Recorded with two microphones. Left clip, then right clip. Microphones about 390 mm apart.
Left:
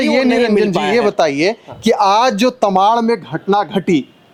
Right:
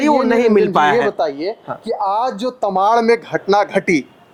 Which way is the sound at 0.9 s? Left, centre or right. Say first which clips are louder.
Left 4 dB; left.